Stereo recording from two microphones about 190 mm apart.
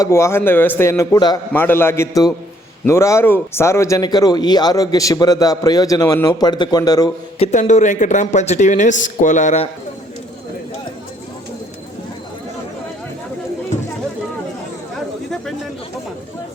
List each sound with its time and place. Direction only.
0.0 s a man's voice: 15° left (ahead or behind)
7.3 s speech: 30° left (ahead or behind)